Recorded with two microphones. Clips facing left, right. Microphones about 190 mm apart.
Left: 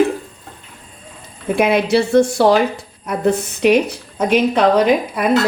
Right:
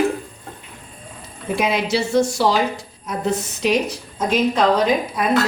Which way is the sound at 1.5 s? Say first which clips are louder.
Left 6 dB; 55° left (ahead or behind).